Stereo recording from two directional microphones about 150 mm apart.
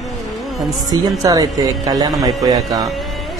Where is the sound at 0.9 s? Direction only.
25° right (ahead or behind).